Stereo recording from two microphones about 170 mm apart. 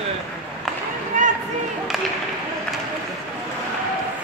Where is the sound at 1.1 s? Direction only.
50° right (ahead or behind).